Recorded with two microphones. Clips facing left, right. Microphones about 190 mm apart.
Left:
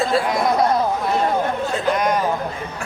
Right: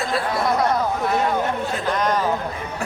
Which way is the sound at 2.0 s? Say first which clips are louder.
Left 1 dB; 10° left (ahead or behind).